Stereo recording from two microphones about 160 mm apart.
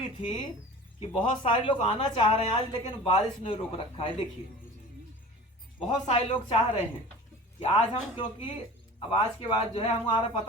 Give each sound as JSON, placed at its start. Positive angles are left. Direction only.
{"t": 0.0, "sound": "speech", "side_deg": 30}
{"t": 6.1, "sound": "speech", "side_deg": 40}